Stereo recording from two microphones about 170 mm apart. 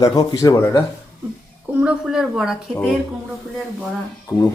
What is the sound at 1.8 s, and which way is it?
Speech, 5° right (ahead or behind).